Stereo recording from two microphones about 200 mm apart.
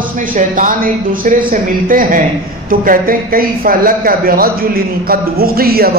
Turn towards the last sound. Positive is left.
turn(degrees=-50)  # may be behind; listen again after turning